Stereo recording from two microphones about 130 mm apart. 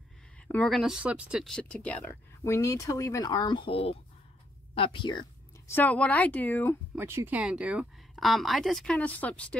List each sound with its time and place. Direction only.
0.5 s speech: 5° left (ahead or behind)
1.4 s a woman's voice: 5° left (ahead or behind)
2.5 s speech: 25° left (ahead or behind)
5.7 s a woman's voice: 15° left (ahead or behind)
7.0 s speech: 20° right (ahead or behind); by 9.6 s 10° left (ahead or behind)